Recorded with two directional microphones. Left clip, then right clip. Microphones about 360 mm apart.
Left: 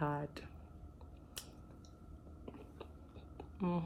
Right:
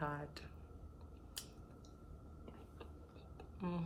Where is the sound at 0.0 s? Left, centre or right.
Left.